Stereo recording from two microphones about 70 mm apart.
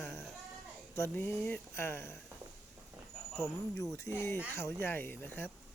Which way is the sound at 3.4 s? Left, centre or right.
Left.